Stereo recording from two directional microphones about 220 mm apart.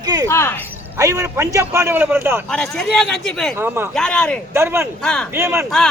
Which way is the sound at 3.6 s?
10° right (ahead or behind).